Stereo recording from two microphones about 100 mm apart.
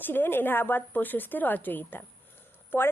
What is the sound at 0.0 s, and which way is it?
Speech, 20° left (ahead or behind).